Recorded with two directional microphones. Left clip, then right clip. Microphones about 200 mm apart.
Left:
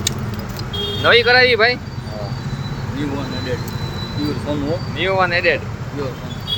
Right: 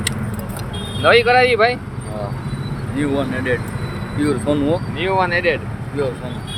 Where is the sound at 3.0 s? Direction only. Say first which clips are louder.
Right 5 dB; 50° right (ahead or behind).